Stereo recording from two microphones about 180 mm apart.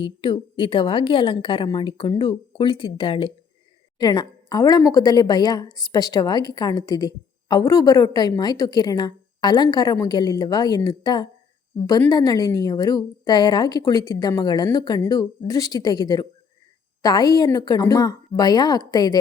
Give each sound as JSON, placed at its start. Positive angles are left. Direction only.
{"t": 0.0, "sound": "a woman's voice", "side_deg": 30}